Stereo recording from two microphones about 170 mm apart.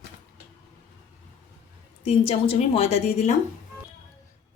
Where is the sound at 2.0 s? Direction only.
35° left (ahead or behind).